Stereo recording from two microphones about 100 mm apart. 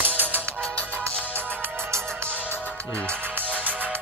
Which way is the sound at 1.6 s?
20° right (ahead or behind).